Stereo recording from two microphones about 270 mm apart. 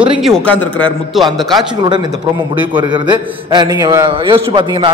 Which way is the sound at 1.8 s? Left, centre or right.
Centre.